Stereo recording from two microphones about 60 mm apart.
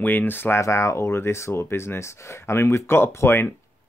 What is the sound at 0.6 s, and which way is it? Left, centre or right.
Speech, left.